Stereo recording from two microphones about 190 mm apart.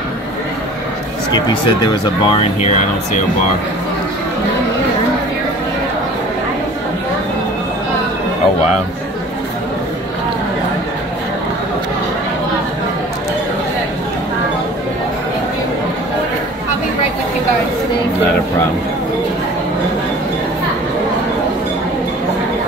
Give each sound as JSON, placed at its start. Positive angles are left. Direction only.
{"t": 1.3, "sound": "speech", "side_deg": 20}